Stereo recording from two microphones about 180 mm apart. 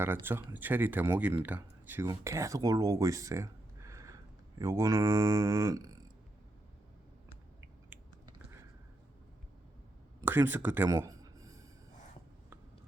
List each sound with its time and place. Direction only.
0.0 s speech: 10° right (ahead or behind)
10.2 s speech: 10° right (ahead or behind)
10.8 s a sound: 20° right (ahead or behind)